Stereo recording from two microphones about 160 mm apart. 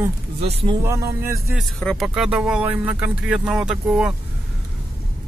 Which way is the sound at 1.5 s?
Centre (ahead or behind).